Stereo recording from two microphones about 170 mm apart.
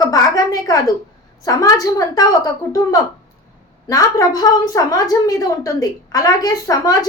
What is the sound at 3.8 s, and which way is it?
A woman's voice, 20° left (ahead or behind).